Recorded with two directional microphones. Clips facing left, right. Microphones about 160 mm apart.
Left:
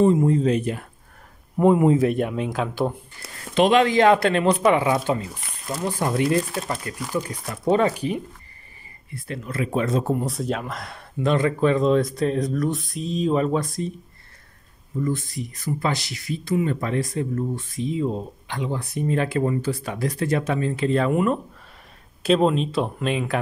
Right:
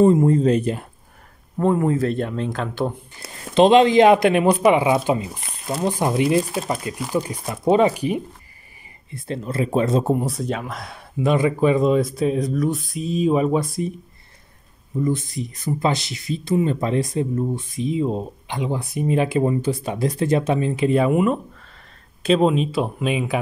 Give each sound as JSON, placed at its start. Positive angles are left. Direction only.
{"t": 0.0, "sound": "speech", "side_deg": -45}
{"t": 1.6, "sound": "speech", "side_deg": 15}
{"t": 3.5, "sound": "speech", "side_deg": -25}
{"t": 9.1, "sound": "speech", "side_deg": -30}
{"t": 10.2, "sound": "speech", "side_deg": 0}
{"t": 15.0, "sound": "speech", "side_deg": -20}